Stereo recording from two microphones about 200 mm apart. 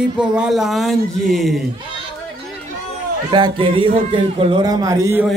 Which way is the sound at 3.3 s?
25° right (ahead or behind).